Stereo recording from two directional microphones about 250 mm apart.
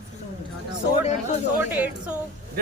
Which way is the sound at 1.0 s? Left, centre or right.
Left.